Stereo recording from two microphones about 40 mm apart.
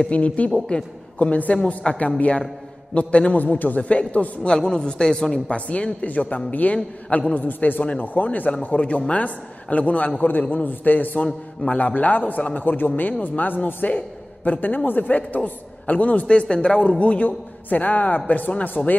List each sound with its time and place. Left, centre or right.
0.1 s a man's voice: left
3.3 s a man's voice: left
4.6 s a man's voice: left
5.5 s a man's voice: left
7.3 s a man's voice: left
16.3 s a man's voice: left